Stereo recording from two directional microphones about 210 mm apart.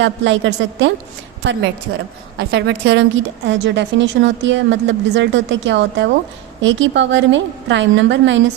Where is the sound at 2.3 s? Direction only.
50° right (ahead or behind).